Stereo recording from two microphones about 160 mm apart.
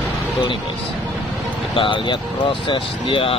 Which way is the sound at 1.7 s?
30° left (ahead or behind).